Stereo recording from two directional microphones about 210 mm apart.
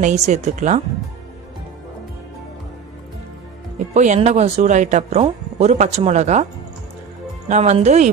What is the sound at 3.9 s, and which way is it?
Speech, 35° right (ahead or behind).